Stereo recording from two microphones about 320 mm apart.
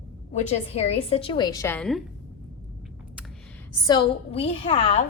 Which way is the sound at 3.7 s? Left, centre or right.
Centre.